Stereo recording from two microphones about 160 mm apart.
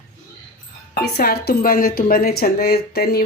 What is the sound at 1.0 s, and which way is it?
A woman's voice, 80° left.